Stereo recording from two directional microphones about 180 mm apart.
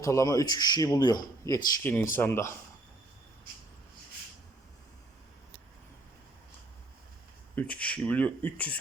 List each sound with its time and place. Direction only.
0.0 s speech: 20° left (ahead or behind)
1.8 s speech: 10° left (ahead or behind)
7.5 s speech: 5° left (ahead or behind)